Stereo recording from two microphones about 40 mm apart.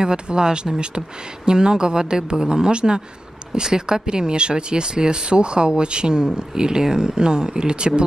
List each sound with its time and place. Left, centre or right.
0.0 s speech: centre